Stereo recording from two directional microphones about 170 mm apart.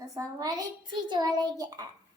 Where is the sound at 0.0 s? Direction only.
20° right (ahead or behind).